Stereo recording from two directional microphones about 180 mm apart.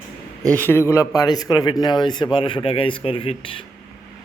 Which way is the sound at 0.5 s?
10° left (ahead or behind).